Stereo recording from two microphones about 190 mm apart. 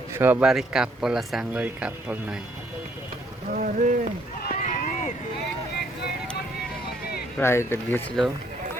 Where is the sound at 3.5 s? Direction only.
45° right (ahead or behind).